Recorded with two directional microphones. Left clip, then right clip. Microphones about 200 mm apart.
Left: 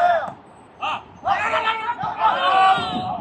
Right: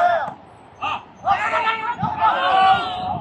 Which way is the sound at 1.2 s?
15° left (ahead or behind).